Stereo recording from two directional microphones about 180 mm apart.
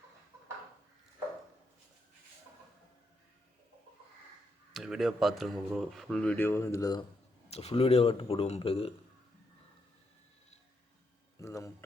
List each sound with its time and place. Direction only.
4.7 s speech: centre (ahead or behind); by 7.0 s 20° left (ahead or behind)
7.5 s speech: 35° left (ahead or behind)
11.3 s a sound: 15° left (ahead or behind)